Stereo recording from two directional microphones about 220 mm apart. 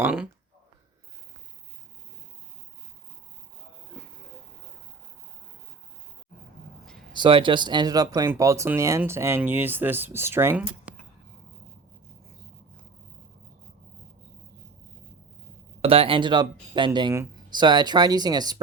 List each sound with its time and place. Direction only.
0.0 s speech: 5° right (ahead or behind)
7.1 s speech: 20° right (ahead or behind)
15.8 s speech: 25° right (ahead or behind)